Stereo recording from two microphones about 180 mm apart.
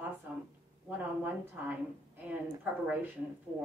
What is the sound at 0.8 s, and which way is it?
Speech, 10° right (ahead or behind).